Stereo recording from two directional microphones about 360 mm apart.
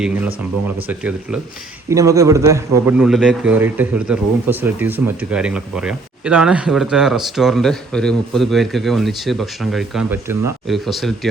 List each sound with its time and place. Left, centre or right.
0.0 s a man's voice: centre